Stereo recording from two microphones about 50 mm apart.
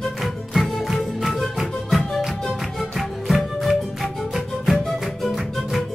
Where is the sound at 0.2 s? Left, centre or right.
Centre.